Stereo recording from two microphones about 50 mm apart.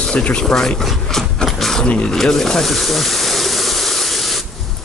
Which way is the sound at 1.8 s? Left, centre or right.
Left.